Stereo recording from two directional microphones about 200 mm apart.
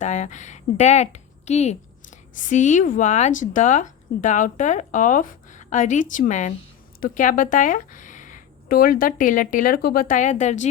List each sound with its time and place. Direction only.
0.0 s a woman's voice: 35° left (ahead or behind)